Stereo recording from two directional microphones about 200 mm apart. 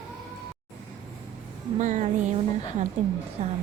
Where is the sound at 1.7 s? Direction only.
35° right (ahead or behind).